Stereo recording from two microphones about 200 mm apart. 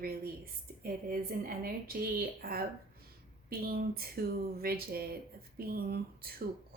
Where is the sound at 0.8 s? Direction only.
45° right (ahead or behind).